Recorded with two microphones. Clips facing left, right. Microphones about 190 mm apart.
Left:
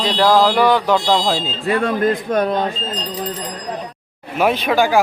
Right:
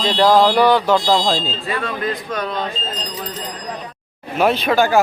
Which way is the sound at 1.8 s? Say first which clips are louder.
Left 8 dB; 50° left (ahead or behind).